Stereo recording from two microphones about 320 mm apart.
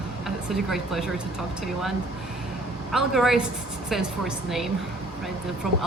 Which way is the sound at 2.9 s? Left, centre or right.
Centre.